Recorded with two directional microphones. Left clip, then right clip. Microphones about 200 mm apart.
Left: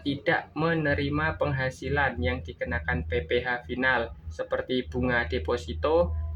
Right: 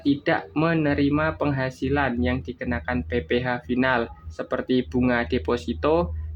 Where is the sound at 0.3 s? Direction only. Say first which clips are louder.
Even; 50° right (ahead or behind).